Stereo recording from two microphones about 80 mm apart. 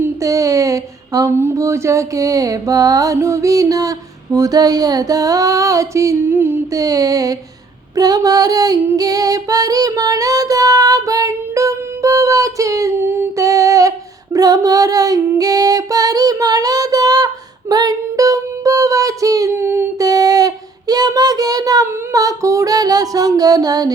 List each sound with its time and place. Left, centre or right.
0.2 s a sound: right
6.1 s a sound: right
6.7 s a sound: right
9.0 s music: right
13.0 s humming: right
13.3 s humming: right
14.3 s female singing: right
19.5 s humming: right
20.0 s child singing: right